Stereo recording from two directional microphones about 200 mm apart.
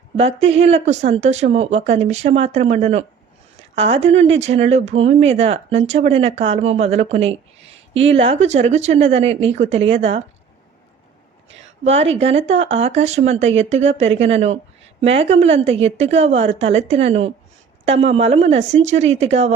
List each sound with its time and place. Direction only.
0.4 s speech: 30° right (ahead or behind)
11.6 s speech: 30° right (ahead or behind)